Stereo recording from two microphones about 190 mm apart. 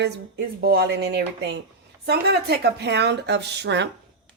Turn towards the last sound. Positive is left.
turn(degrees=-65)  # may be behind; listen again after turning